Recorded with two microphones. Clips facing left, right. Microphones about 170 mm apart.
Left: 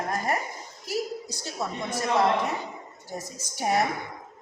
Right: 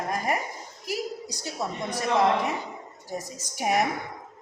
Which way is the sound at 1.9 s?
15° right (ahead or behind).